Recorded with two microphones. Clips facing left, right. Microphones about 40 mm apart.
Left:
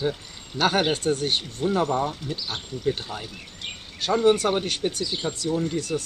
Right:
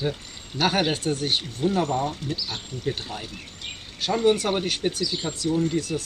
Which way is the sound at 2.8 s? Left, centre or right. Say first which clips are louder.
Left 3 dB; centre.